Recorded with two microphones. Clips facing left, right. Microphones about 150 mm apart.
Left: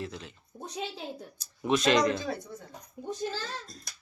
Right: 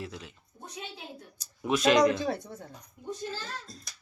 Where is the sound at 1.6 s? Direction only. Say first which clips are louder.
Right 2 dB; 5° right (ahead or behind).